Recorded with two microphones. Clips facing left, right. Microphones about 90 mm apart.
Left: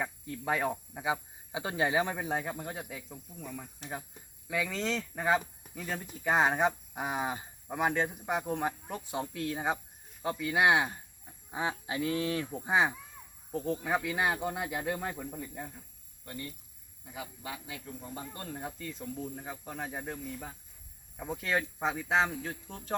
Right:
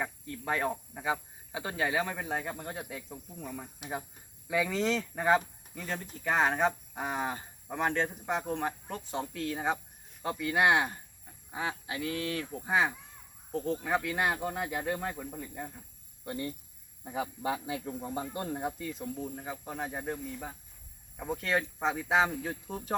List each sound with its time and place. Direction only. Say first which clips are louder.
0.3 s speech: left 1 dB; 10° left (ahead or behind)
11.9 s speech: left 3 dB; 25° left (ahead or behind); by 15.8 s centre (ahead or behind)
16.2 s speech: right 6 dB; 25° right (ahead or behind)
17.0 s speech: right 8 dB; 40° right (ahead or behind); by 18.7 s 20° right (ahead or behind)
18.8 s speech: right 2 dB; 5° right (ahead or behind)